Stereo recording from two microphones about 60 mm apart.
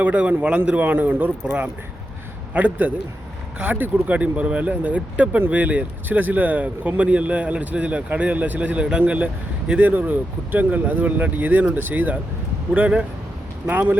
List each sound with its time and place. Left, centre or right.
0.0 s a man's voice: right
13.7 s speech: right